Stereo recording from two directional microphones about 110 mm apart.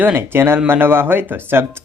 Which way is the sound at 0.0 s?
20° right (ahead or behind).